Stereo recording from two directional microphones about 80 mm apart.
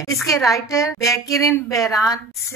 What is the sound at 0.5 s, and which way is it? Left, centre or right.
Female singing, left.